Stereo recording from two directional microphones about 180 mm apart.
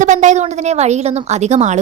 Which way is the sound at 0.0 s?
45° right (ahead or behind).